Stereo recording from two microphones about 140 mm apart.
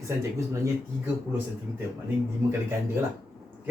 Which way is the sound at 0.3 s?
20° right (ahead or behind).